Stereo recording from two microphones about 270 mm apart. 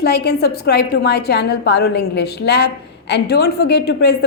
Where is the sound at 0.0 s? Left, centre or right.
Left.